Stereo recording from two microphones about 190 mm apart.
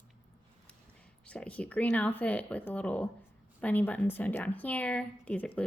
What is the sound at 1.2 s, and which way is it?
Speech, 5° left (ahead or behind).